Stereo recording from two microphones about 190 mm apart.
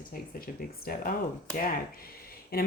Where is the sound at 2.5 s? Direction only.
55° left (ahead or behind).